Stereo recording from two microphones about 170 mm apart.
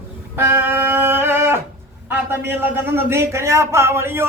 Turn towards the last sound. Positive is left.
turn(degrees=-15)  # may be behind; listen again after turning